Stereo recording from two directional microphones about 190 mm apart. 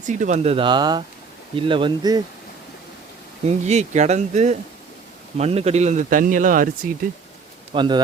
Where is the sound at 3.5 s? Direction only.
35° right (ahead or behind).